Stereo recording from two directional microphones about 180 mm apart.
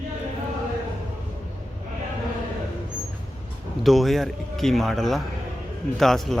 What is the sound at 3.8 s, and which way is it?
Speech, centre (ahead or behind).